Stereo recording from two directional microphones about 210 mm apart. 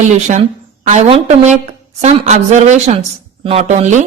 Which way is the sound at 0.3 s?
35° right (ahead or behind).